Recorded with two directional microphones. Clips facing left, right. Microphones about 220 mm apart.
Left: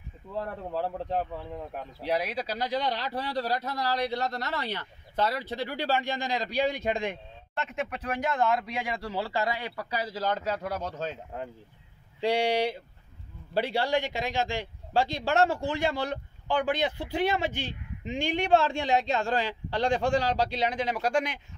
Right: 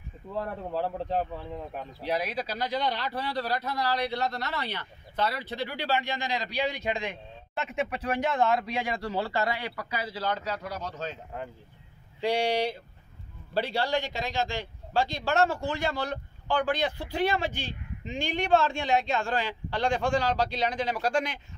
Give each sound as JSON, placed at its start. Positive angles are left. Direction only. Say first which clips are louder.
{"t": 0.8, "sound": "speech", "louder": "right 1 dB", "side_deg": 15}
{"t": 2.6, "sound": "a man's voice", "louder": "even", "side_deg": 35}
{"t": 7.5, "sound": "speech", "louder": "right 2 dB", "side_deg": -5}
{"t": 9.8, "sound": "a man's voice", "louder": "left 2 dB", "side_deg": 35}
{"t": 12.2, "sound": "a man's voice", "louder": "left 1 dB", "side_deg": 25}